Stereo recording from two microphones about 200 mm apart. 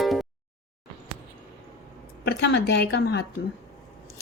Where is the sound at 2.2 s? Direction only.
55° left (ahead or behind).